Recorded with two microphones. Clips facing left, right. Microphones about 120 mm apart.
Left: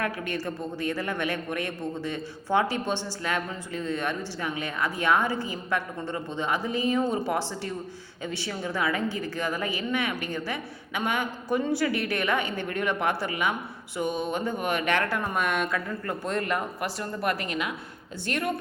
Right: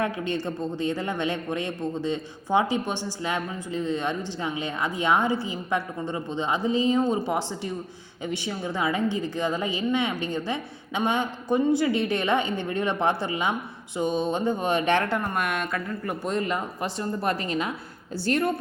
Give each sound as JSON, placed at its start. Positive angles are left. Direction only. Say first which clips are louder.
{"t": 0.0, "sound": "a man's voice", "louder": "right 3 dB", "side_deg": -25}
{"t": 15.3, "sound": "a woman's voice", "louder": "left 1 dB", "side_deg": 0}
{"t": 16.0, "sound": "a man's voice", "louder": "right 2 dB", "side_deg": -15}